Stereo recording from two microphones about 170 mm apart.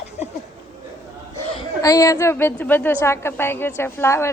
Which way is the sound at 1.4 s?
35° left (ahead or behind).